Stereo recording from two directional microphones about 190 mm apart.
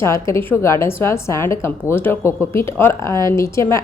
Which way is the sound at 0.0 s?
15° left (ahead or behind).